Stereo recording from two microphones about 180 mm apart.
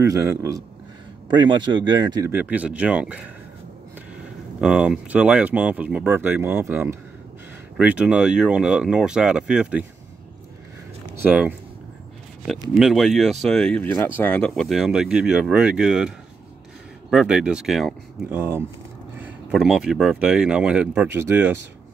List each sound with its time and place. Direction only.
0.0 s speech: 15° right (ahead or behind)
4.6 s speech: 5° right (ahead or behind)
11.2 s speech: 10° right (ahead or behind)
12.7 s speech: centre (ahead or behind)
17.1 s speech: 5° right (ahead or behind)
18.3 s speech: 10° right (ahead or behind)